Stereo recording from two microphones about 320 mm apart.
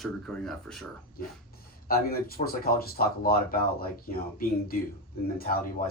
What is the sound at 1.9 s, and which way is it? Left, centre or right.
Speech, left.